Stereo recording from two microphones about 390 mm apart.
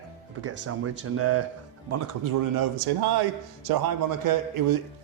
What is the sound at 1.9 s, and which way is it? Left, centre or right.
A man's voice, right.